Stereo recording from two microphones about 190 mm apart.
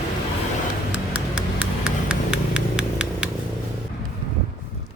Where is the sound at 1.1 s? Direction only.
5° right (ahead or behind).